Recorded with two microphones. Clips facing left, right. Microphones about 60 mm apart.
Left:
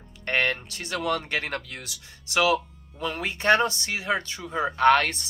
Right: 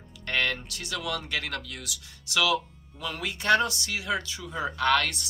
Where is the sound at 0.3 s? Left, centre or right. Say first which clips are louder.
Left 3 dB; left.